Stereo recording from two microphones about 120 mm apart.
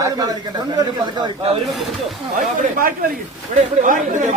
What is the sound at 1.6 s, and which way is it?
Speech, centre (ahead or behind).